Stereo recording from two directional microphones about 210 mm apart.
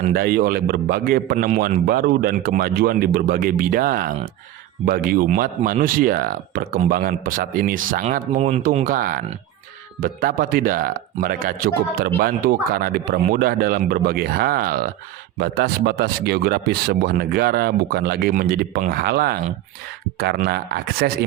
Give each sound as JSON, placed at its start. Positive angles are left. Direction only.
{"t": 0.0, "sound": "speech", "side_deg": -45}